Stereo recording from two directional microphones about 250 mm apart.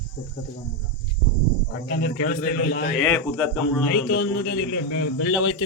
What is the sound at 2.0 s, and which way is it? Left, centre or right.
Speech, left.